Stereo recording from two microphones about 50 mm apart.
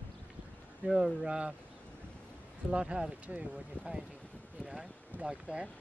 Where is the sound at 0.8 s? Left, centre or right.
Centre.